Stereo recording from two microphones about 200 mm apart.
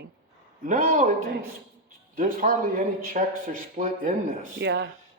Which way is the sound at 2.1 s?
45° right (ahead or behind).